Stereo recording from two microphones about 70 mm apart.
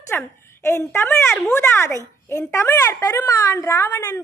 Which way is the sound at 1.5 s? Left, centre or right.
Left.